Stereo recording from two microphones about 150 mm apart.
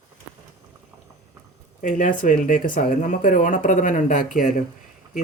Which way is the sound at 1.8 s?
60° left (ahead or behind).